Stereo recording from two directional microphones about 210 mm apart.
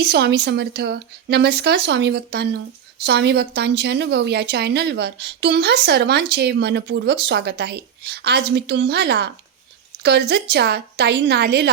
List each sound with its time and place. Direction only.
0.0 s a woman's voice: 50° right (ahead or behind)